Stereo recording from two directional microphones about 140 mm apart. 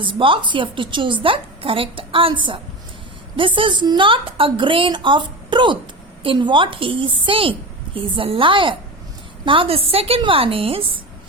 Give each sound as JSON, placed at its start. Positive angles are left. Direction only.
{"t": 0.0, "sound": "a woman's voice", "side_deg": -40}